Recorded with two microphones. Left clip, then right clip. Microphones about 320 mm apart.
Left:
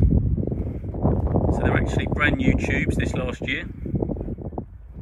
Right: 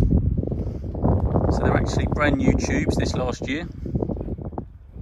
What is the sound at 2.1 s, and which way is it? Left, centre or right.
Speech, centre.